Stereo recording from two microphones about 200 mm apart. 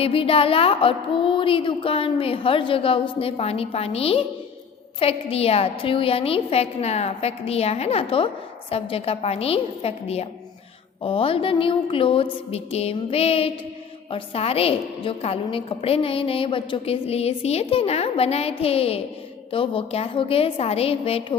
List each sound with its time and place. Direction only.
0.0 s a woman's voice: 30° left (ahead or behind)